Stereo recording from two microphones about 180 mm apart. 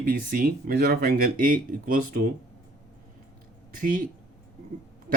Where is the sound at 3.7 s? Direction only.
50° right (ahead or behind).